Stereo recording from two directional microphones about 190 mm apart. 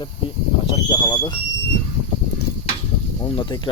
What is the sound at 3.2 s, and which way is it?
Speech, 25° left (ahead or behind).